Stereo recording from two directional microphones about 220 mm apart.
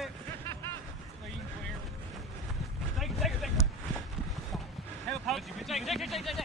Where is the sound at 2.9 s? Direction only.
Centre (ahead or behind).